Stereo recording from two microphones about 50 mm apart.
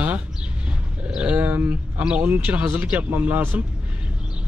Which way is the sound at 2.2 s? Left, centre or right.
Right.